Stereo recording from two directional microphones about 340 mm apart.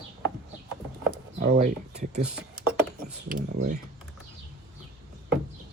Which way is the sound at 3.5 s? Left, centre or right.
Right.